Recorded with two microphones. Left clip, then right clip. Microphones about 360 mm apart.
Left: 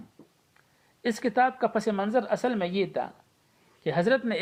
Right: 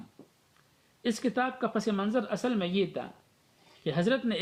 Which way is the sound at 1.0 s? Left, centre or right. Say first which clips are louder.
Left 6 dB; centre.